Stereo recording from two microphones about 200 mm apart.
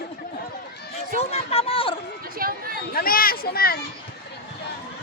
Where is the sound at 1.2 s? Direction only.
30° left (ahead or behind).